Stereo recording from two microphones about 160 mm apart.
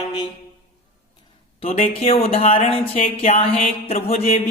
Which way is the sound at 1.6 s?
40° left (ahead or behind).